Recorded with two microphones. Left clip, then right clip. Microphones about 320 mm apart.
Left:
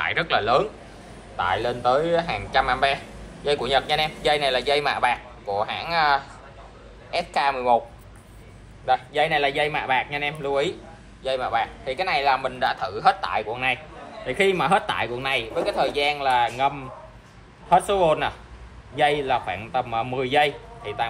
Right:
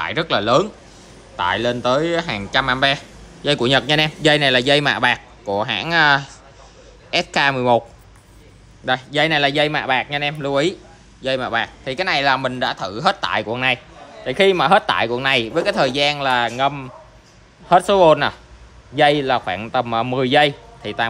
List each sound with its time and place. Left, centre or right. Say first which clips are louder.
0.0 s speech: right 3 dB; right
8.8 s speech: right 3 dB; right